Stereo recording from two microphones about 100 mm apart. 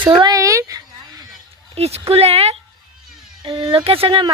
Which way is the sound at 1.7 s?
90° right.